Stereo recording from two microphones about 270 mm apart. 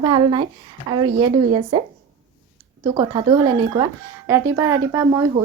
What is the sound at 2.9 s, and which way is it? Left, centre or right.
A woman's voice, centre.